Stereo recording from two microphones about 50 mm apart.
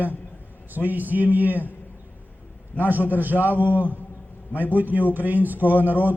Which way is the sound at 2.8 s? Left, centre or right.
Right.